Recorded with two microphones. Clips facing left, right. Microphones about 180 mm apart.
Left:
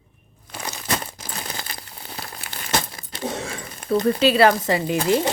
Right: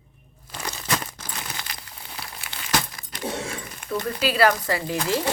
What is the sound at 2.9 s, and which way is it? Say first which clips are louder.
Keys jangling: left 2 dB; 30° left (ahead or behind).